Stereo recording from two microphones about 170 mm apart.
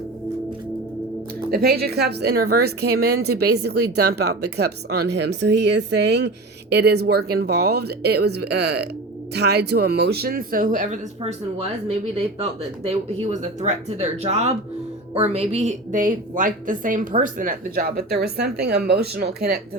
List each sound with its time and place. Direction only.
1.5 s speech: 65° right (ahead or behind)
11.2 s a woman's voice: 35° right (ahead or behind); by 19.6 s 70° right (ahead or behind)